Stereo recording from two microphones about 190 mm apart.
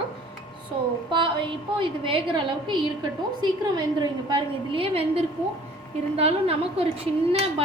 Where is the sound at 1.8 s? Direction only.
25° right (ahead or behind).